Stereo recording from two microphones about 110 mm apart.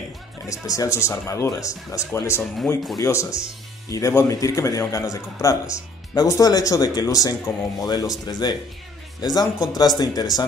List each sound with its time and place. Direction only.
0.5 s a man's voice: 30° left (ahead or behind)